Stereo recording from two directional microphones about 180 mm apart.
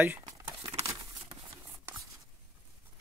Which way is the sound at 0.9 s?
35° right (ahead or behind).